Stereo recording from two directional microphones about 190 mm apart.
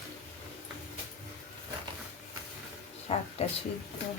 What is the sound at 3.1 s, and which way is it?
Speech, 35° left (ahead or behind).